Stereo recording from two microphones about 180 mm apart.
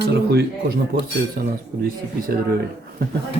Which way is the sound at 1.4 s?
50° right (ahead or behind).